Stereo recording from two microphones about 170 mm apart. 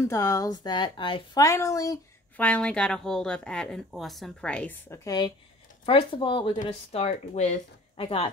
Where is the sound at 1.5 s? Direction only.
20° left (ahead or behind).